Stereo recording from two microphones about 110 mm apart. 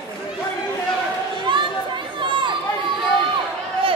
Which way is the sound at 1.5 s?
45° right (ahead or behind).